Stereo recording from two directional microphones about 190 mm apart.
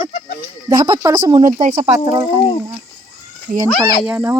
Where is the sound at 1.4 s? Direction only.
40° right (ahead or behind).